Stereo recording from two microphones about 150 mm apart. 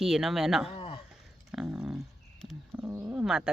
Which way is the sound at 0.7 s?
40° left (ahead or behind).